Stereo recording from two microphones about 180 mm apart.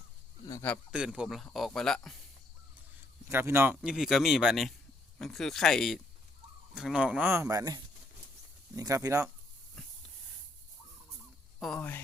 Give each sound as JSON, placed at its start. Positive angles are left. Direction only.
{"t": 0.9, "sound": "speech", "side_deg": -5}
{"t": 3.2, "sound": "speech", "side_deg": -15}
{"t": 3.8, "sound": "speech", "side_deg": 0}
{"t": 11.6, "sound": "speech", "side_deg": 5}